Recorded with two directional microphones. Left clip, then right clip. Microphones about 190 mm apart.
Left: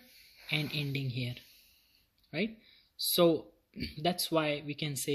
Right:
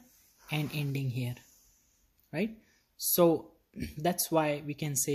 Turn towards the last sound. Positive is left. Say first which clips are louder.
# right 2 dB
turn(degrees=-10)  # may be behind; listen again after turning